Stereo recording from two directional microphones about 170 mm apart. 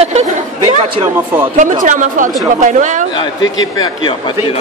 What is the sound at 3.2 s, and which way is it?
A man's voice, 25° left (ahead or behind).